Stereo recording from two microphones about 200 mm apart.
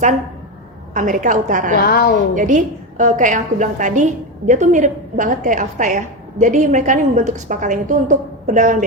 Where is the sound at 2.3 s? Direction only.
40° right (ahead or behind).